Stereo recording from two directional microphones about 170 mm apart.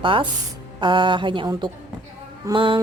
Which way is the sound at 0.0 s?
30° right (ahead or behind).